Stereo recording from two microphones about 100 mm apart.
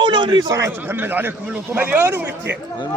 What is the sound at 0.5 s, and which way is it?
Speech, 30° right (ahead or behind).